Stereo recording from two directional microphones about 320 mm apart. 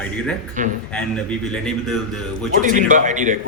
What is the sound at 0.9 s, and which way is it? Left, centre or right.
A man's voice, centre.